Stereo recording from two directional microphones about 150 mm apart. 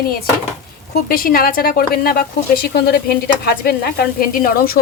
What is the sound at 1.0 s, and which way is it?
A woman's voice, 75° left (ahead or behind).